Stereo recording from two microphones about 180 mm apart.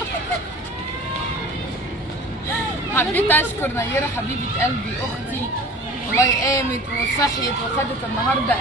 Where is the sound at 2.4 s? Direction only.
10° left (ahead or behind).